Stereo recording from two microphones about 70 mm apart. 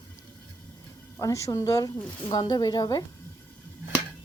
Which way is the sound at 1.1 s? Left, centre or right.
Left.